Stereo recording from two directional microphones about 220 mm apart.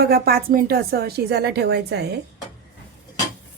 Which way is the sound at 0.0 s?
45° right (ahead or behind).